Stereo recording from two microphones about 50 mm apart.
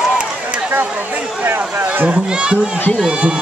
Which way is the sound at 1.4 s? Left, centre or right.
Right.